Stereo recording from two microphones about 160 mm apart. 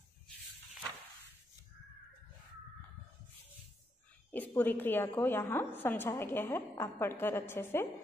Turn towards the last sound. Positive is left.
turn(degrees=15)  # may be behind; listen again after turning